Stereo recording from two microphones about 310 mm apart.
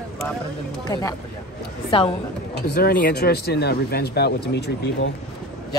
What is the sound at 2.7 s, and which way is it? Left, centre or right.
Speech, left.